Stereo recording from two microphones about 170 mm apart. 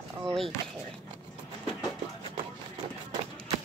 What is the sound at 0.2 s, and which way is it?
Speech, centre (ahead or behind).